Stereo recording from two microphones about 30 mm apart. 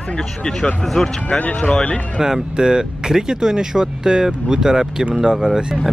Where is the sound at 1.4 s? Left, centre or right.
Left.